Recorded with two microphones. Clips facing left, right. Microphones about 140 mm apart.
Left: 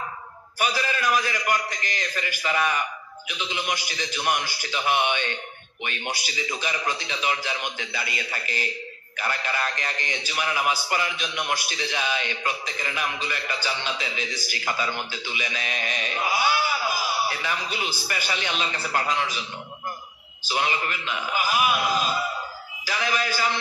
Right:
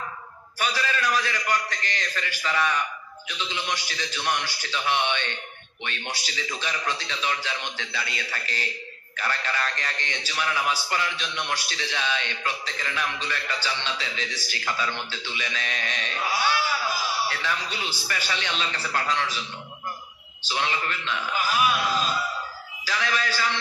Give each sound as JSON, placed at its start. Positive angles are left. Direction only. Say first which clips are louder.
{"t": 0.6, "sound": "a man's voice", "louder": "left 1 dB", "side_deg": 10}
{"t": 20.4, "sound": "a man's voice", "louder": "left 2 dB", "side_deg": 10}